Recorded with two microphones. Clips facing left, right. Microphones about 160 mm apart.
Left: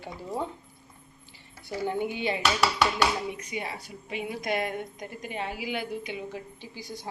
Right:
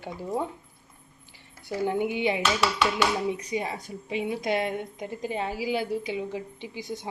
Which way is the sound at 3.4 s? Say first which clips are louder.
Right 5 dB; 35° right (ahead or behind).